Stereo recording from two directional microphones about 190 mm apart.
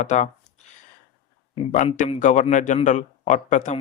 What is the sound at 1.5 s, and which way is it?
Speech, 35° left (ahead or behind).